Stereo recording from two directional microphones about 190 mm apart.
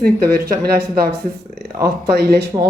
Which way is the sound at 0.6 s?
55° right (ahead or behind).